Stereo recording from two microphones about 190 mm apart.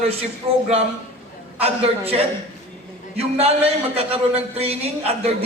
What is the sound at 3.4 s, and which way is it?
A man's voice, 30° right (ahead or behind).